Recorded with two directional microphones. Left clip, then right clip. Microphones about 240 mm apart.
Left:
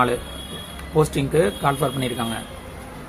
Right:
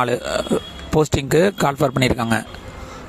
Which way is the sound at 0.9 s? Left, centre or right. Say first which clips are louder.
Right 2 dB; right.